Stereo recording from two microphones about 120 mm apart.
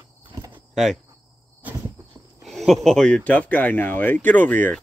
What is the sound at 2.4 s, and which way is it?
Speech, centre (ahead or behind).